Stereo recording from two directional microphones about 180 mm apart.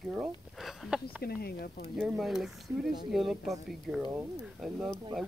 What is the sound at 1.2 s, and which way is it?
Speech, 60° left (ahead or behind).